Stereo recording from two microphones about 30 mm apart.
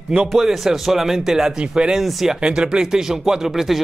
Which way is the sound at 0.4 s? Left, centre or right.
Centre.